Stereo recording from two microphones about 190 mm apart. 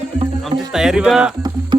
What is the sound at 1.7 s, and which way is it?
Music, 25° right (ahead or behind).